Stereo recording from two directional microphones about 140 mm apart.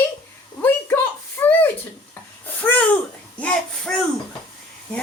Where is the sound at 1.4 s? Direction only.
15° left (ahead or behind).